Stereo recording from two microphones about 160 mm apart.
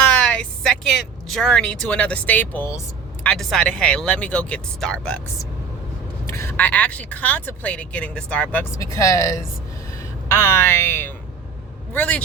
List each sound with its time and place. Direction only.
0.0 s a woman's voice: 5° left (ahead or behind)
3.2 s speech: 5° left (ahead or behind)
6.4 s speech: 10° left (ahead or behind)
8.7 s a woman's voice: 20° left (ahead or behind)